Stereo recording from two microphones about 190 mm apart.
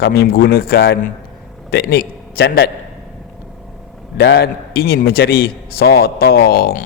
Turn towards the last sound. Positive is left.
turn(degrees=55)  # may be behind; listen again after turning